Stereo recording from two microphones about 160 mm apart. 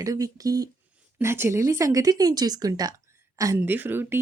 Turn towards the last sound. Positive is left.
turn(degrees=-15)  # may be behind; listen again after turning